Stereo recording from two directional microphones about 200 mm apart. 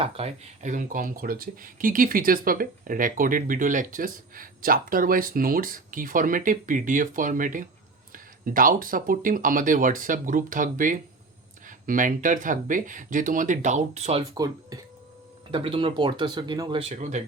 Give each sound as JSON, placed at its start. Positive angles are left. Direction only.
{"t": 0.0, "sound": "speech", "side_deg": -30}
{"t": 14.3, "sound": "speech", "side_deg": -20}